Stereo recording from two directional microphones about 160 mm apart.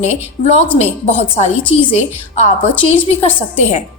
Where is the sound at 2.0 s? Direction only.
45° left (ahead or behind).